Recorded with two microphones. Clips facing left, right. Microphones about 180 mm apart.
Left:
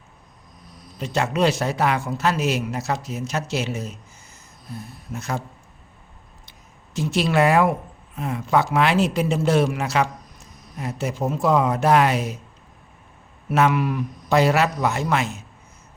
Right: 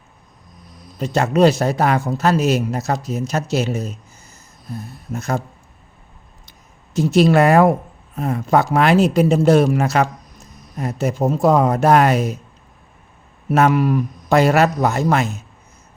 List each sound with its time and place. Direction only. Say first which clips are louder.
0.9 s a man's voice: right 6 dB; 45° right (ahead or behind)
6.9 s speech: right 7 dB; 40° right (ahead or behind)
13.5 s a man's voice: right 5 dB; 40° right (ahead or behind)